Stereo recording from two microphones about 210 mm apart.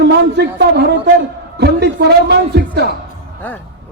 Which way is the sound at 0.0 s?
50° right (ahead or behind).